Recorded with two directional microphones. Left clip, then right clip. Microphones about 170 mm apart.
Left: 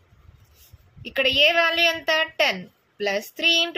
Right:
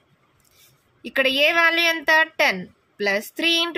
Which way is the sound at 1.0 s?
40° right (ahead or behind).